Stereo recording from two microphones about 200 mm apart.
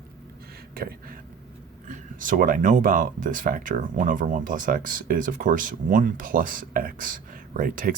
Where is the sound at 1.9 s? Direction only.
40° right (ahead or behind).